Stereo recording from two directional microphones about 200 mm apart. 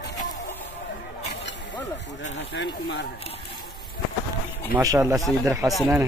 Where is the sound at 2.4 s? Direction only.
60° left (ahead or behind).